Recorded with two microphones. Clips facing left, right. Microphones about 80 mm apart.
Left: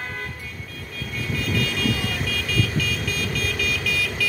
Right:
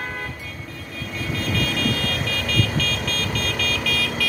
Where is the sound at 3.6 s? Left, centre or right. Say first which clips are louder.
Right 1 dB; centre.